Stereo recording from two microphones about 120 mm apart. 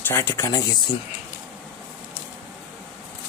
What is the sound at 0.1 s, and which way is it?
Speech, 20° left (ahead or behind).